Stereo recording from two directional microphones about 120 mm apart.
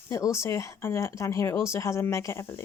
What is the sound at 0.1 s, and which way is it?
Speech, 25° left (ahead or behind).